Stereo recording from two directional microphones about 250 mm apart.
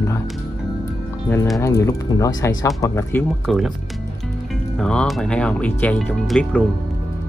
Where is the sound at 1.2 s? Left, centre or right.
Centre.